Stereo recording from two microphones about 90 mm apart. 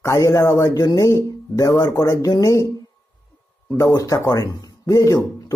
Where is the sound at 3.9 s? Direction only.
40° left (ahead or behind).